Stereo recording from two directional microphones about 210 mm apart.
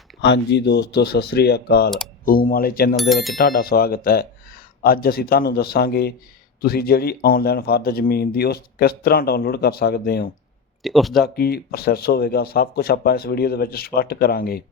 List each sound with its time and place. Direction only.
0.2 s speech: 55° left (ahead or behind)
2.9 s speech: centre (ahead or behind)
3.3 s speech: 45° left (ahead or behind)
10.8 s speech: centre (ahead or behind)
11.2 s speech: 50° left (ahead or behind)